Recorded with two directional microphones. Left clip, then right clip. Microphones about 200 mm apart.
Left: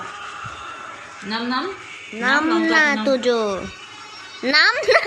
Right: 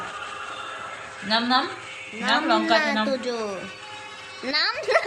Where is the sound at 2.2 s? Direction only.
20° left (ahead or behind).